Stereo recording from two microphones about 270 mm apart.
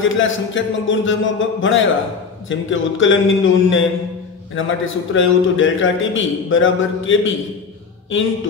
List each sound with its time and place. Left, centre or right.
0.0 s a man's voice: left